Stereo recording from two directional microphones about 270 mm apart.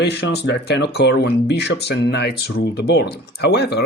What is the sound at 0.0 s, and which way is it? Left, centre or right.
Speech, left.